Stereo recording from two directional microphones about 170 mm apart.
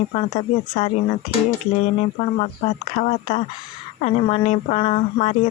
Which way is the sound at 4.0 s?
35° left (ahead or behind).